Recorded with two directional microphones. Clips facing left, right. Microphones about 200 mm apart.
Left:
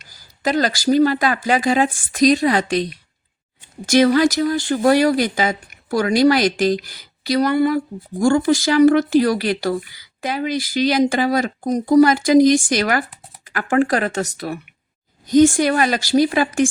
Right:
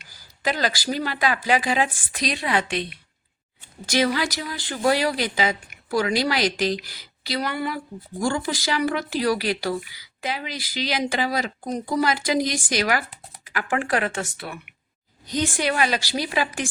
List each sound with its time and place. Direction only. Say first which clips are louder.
0.0 s speech: left 5 dB; 45° left (ahead or behind)